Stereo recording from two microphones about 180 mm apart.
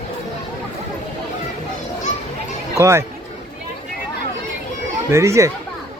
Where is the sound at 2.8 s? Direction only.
15° right (ahead or behind).